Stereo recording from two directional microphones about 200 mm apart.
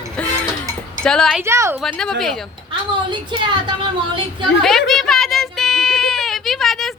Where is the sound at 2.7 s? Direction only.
25° right (ahead or behind).